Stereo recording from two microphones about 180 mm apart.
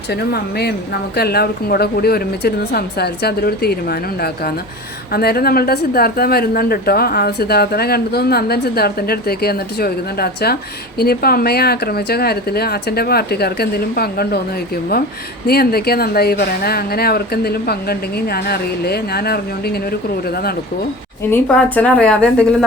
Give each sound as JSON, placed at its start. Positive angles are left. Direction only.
{"t": 1.1, "sound": "a woman's voice", "side_deg": 60}
{"t": 15.4, "sound": "a woman's voice", "side_deg": 60}
{"t": 21.2, "sound": "a woman's voice", "side_deg": 10}